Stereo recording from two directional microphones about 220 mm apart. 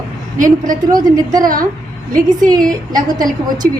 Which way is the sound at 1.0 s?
15° right (ahead or behind).